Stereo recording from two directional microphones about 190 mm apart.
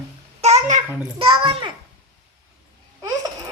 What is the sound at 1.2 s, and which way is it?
Speech, 30° right (ahead or behind).